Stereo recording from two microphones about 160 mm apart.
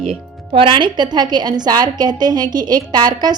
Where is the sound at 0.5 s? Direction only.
30° right (ahead or behind).